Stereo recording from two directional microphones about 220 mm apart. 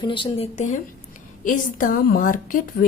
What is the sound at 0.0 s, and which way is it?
A woman's voice, 20° left (ahead or behind).